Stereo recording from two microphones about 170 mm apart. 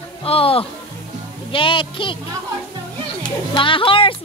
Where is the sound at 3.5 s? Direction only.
30° left (ahead or behind).